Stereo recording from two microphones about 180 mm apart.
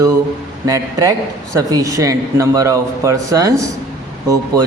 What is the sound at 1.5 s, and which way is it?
A woman's voice, 20° right (ahead or behind).